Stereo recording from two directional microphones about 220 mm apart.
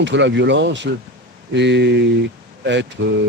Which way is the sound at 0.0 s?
55° right (ahead or behind).